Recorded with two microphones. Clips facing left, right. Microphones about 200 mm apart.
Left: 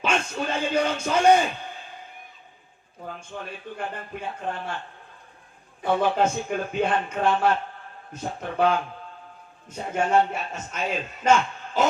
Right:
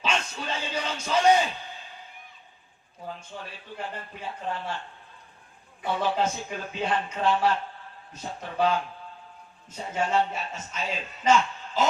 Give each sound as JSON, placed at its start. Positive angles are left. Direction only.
{"t": 0.0, "sound": "speech", "side_deg": 55}
{"t": 3.1, "sound": "a man's voice", "side_deg": 55}
{"t": 5.8, "sound": "a man's voice", "side_deg": 55}